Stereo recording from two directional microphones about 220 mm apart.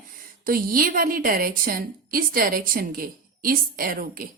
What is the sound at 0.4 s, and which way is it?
A woman's voice, 40° right (ahead or behind).